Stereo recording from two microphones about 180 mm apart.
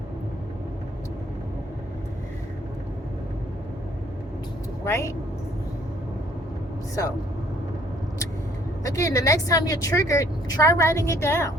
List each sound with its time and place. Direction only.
4.9 s a woman's voice: 15° left (ahead or behind)
8.8 s a woman's voice: 15° left (ahead or behind)